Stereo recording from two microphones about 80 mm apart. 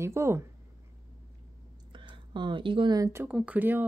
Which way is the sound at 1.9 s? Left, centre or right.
Right.